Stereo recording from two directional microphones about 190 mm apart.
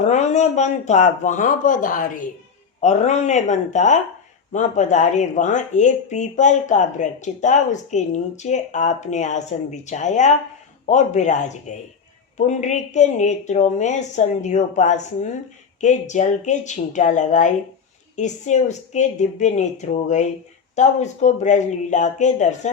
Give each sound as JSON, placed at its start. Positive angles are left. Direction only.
{"t": 0.0, "sound": "speech", "side_deg": 35}